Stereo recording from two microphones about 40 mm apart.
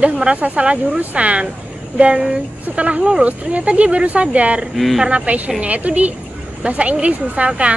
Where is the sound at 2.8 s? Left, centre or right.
Right.